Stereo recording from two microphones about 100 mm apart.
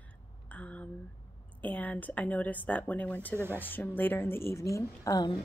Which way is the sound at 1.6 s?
15° left (ahead or behind).